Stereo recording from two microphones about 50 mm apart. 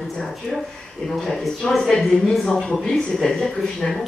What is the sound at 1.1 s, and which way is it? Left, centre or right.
Speech, centre.